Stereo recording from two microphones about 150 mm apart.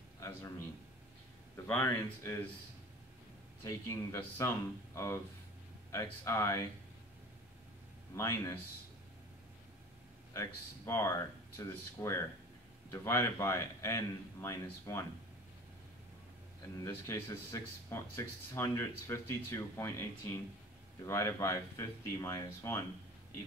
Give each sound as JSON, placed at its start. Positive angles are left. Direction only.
{"t": 0.2, "sound": "a man's voice", "side_deg": 15}
{"t": 1.7, "sound": "speech", "side_deg": 15}
{"t": 3.6, "sound": "a man's voice", "side_deg": 20}
{"t": 8.2, "sound": "a man's voice", "side_deg": 20}
{"t": 10.3, "sound": "a man's voice", "side_deg": 20}
{"t": 16.7, "sound": "a man's voice", "side_deg": 20}